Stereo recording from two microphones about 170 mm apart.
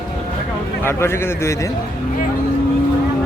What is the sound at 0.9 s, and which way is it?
Speech, 15° left (ahead or behind).